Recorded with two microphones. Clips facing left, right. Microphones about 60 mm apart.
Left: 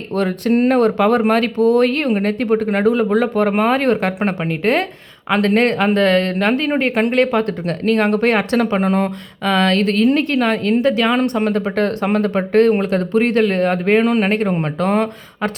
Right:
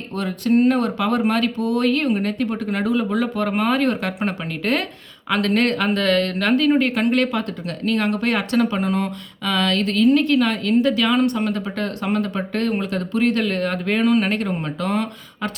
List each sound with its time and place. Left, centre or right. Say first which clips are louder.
0.2 s a woman's voice: left 2 dB; left